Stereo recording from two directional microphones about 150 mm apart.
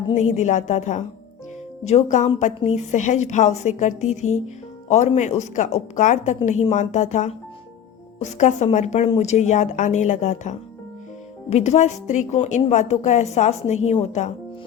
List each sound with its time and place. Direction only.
0.2 s a woman's voice: 50° left (ahead or behind)